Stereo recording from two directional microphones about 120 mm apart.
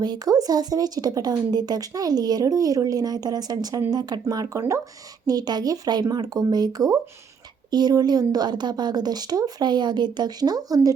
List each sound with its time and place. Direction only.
0.0 s speech: 35° right (ahead or behind)